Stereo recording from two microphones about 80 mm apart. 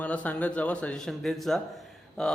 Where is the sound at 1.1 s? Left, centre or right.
Centre.